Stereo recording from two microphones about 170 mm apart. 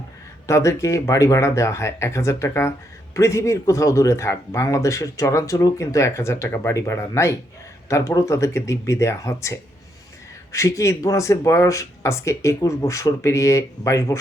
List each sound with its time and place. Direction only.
0.4 s speech: 15° left (ahead or behind)